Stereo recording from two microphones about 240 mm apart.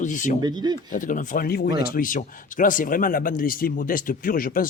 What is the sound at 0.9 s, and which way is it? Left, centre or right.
A man's voice, left.